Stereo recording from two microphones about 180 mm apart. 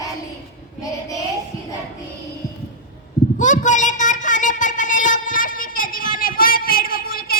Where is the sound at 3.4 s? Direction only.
45° left (ahead or behind).